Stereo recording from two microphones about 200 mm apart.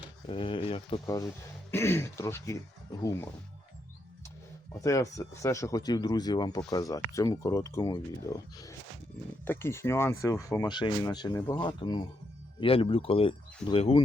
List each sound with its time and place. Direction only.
0.3 s speech: 25° left (ahead or behind)
1.0 s speech: 15° left (ahead or behind)
4.8 s speech: 15° left (ahead or behind)